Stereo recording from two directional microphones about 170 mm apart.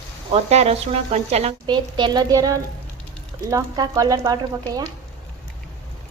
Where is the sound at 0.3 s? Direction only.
40° right (ahead or behind).